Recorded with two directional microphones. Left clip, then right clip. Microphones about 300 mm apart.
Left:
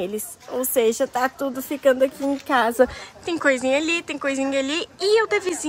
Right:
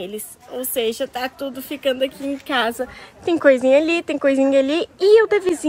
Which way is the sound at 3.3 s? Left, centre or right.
Centre.